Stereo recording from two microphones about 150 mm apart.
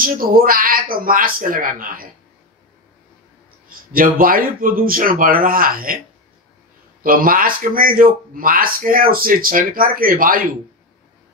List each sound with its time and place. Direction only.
0.0 s a man's voice: 70° right (ahead or behind)
3.6 s a man's voice: 70° right (ahead or behind)
7.0 s a man's voice: 70° right (ahead or behind)